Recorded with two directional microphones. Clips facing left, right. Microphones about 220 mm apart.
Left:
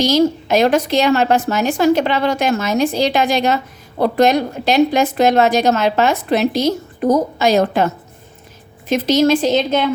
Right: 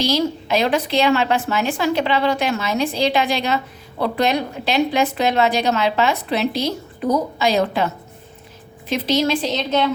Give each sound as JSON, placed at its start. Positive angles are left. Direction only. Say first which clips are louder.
{"t": 0.0, "sound": "a woman's voice", "louder": "left 6 dB", "side_deg": 45}